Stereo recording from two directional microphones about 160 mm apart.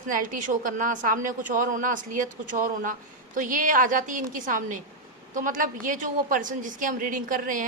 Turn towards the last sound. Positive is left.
turn(degrees=-60)  # may be behind; listen again after turning